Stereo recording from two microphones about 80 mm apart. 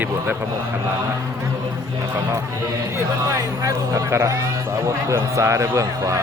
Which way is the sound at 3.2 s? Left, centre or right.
Right.